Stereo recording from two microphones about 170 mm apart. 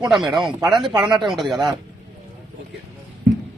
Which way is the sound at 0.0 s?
Centre (ahead or behind).